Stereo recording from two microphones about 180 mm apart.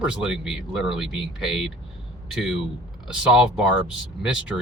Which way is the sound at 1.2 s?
30° left (ahead or behind).